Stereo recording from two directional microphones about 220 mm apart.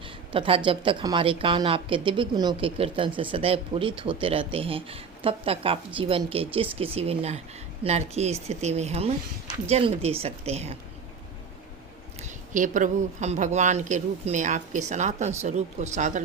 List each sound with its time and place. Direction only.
0.3 s speech: 25° right (ahead or behind)
12.2 s speech: 35° right (ahead or behind)